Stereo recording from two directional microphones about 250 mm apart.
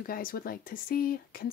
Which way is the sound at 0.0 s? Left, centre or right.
Left.